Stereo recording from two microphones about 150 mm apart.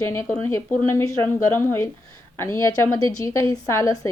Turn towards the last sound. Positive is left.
turn(degrees=20)  # may be behind; listen again after turning